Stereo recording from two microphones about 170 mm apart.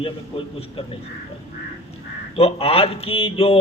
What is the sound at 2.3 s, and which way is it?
Speech, 35° left (ahead or behind).